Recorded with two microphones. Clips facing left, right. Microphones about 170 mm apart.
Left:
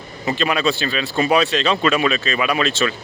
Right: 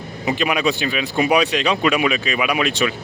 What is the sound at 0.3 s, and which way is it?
Speech, 15° right (ahead or behind).